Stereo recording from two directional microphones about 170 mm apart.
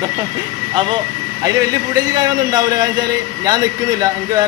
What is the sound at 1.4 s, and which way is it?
Speech, 20° right (ahead or behind).